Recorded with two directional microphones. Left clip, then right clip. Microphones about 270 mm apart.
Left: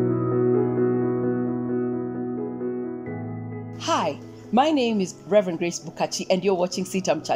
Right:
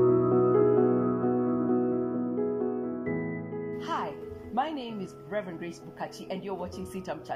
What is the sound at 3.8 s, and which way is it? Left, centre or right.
Music, left.